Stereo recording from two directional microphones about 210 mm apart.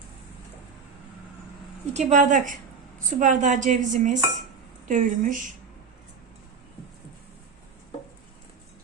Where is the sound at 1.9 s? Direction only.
35° right (ahead or behind).